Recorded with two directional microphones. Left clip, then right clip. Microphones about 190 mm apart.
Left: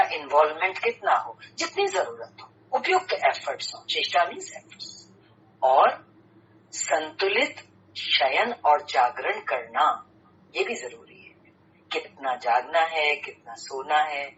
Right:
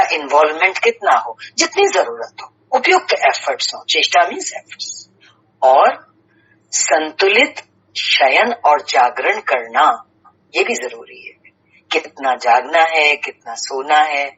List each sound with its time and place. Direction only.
0.0 s speech: 40° right (ahead or behind)